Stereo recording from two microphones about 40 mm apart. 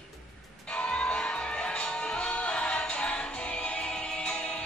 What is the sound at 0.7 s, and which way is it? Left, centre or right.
Music, left.